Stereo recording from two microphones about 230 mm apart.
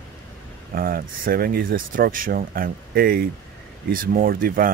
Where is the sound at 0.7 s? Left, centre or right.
Right.